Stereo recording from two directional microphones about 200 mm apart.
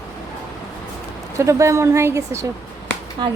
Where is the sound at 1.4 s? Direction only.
15° right (ahead or behind).